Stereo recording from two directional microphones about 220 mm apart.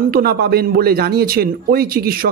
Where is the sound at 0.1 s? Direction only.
45° right (ahead or behind).